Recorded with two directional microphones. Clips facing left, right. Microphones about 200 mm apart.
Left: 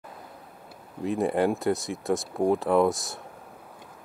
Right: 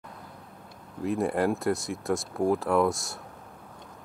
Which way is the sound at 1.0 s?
Centre (ahead or behind).